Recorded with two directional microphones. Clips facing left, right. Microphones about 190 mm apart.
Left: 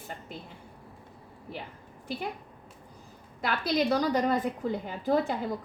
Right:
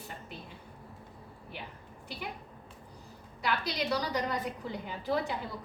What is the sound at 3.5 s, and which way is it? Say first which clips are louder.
A woman's voice: left 5 dB; 50° left (ahead or behind).